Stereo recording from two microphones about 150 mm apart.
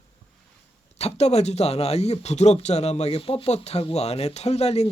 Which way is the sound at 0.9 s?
45° left (ahead or behind).